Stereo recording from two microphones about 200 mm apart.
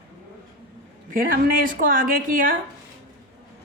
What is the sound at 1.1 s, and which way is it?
A man's voice, 45° right (ahead or behind).